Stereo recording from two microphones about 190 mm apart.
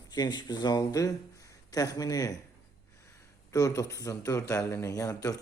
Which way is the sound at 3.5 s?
20° left (ahead or behind).